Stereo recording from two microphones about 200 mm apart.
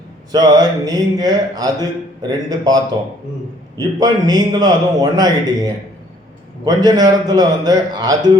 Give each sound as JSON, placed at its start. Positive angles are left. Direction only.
{"t": 0.3, "sound": "a man's voice", "side_deg": -20}
{"t": 6.7, "sound": "a man's voice", "side_deg": -20}